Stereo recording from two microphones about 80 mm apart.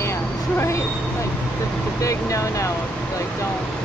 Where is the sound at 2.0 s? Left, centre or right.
Left.